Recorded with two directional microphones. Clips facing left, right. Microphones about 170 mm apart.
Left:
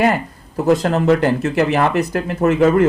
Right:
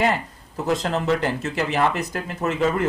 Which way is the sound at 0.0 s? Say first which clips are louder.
Left 5 dB; 60° left (ahead or behind).